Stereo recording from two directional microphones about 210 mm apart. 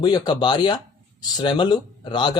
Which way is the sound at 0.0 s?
20° left (ahead or behind).